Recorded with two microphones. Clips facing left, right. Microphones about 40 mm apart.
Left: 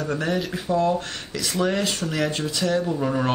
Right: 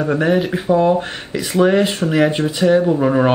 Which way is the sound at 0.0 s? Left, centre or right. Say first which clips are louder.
Right 9 dB; right.